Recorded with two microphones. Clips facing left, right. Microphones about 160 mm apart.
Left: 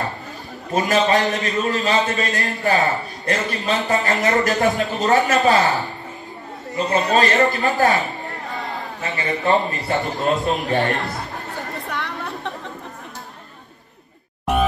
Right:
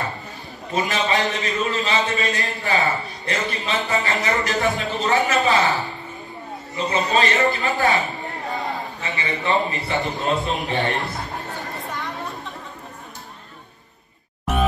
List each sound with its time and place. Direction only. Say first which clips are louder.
0.7 s a man's voice: left 4 dB; 40° left (ahead or behind)
7.1 s a man's voice: left 2 dB; 40° left (ahead or behind)
9.0 s a man's voice: left 5 dB; 40° left (ahead or behind)
11.9 s chatter: left 3 dB; 70° left (ahead or behind)